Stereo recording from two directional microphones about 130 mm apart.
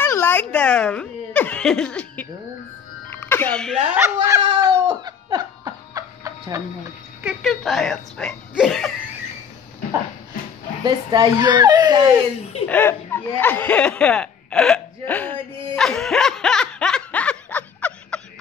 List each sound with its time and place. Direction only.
0.0 s speech: 15° left (ahead or behind)
3.1 s music: 15° left (ahead or behind)
3.9 s speech: 15° right (ahead or behind)
4.5 s a sound: 35° right (ahead or behind)
7.2 s speech: centre (ahead or behind)
10.8 s a child's voice: 35° right (ahead or behind)
12.6 s speech: 15° left (ahead or behind)
15.7 s snicker: 5° left (ahead or behind)